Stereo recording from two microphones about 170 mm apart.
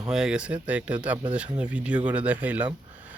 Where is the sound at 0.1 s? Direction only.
5° right (ahead or behind).